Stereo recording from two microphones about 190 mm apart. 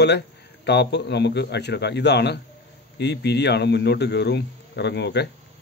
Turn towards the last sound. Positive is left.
turn(degrees=60)  # may be behind; listen again after turning